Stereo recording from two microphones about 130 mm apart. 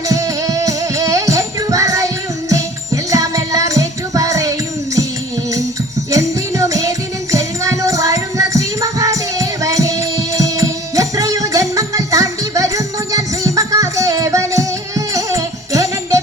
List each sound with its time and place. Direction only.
0.1 s music: 25° right (ahead or behind)
6.1 s music: 25° right (ahead or behind)